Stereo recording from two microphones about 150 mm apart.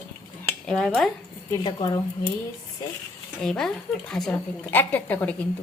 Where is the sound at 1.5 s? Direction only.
25° left (ahead or behind).